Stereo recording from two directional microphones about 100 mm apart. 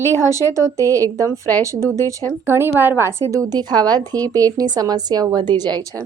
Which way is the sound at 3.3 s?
40° right (ahead or behind).